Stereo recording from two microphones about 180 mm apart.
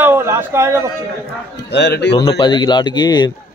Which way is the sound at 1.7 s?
70° left (ahead or behind).